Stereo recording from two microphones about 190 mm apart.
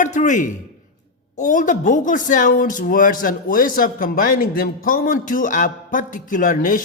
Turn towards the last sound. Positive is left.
turn(degrees=45)  # may be behind; listen again after turning